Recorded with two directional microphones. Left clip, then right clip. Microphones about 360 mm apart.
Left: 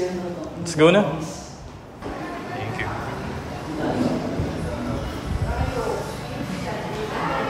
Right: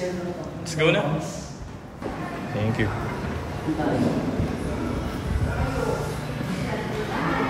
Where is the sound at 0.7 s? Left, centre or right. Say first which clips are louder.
Left 6 dB; centre.